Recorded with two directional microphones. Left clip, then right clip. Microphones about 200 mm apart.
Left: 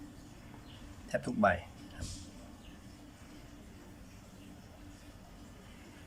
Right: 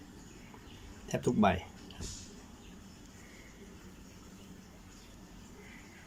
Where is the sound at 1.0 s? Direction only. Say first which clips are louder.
Even; 10° right (ahead or behind).